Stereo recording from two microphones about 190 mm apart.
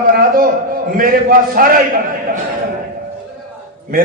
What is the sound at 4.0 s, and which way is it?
Speech, 50° right (ahead or behind).